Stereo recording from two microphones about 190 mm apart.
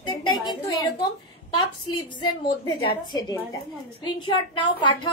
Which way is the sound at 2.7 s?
25° left (ahead or behind).